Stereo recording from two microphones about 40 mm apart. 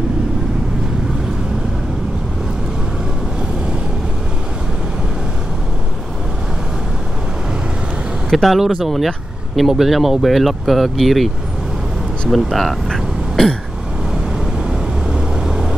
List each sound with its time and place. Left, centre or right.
8.3 s speech: centre
12.3 s speech: centre
14.4 s vehicle: centre